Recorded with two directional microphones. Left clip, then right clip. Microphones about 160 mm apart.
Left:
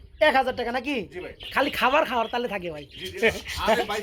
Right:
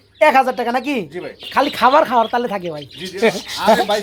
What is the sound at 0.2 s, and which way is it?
Speech, 5° right (ahead or behind).